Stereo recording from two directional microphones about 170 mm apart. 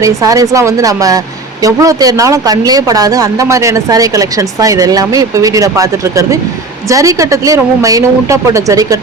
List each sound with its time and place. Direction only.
0.0 s speech: 20° right (ahead or behind)